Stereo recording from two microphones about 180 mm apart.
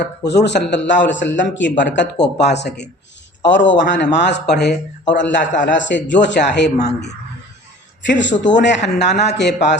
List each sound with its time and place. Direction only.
0.0 s speech: 70° left (ahead or behind)
3.5 s speech: 85° left
8.0 s speech: 85° left; by 9.7 s 70° left (ahead or behind)